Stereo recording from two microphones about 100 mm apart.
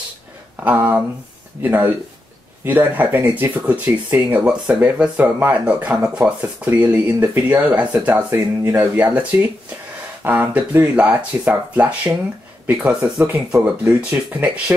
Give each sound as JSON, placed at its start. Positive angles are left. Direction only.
{"t": 0.6, "sound": "speech", "side_deg": -20}